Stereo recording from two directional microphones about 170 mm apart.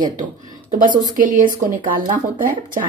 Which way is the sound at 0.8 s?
55° right (ahead or behind).